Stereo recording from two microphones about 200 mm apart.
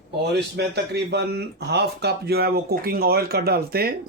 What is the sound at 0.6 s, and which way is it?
A man's voice, 55° right (ahead or behind).